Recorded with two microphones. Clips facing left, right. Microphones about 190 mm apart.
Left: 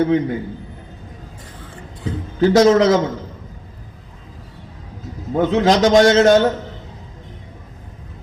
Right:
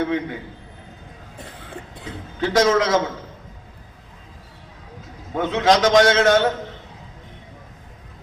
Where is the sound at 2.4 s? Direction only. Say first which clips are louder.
Left 6 dB; 35° left (ahead or behind).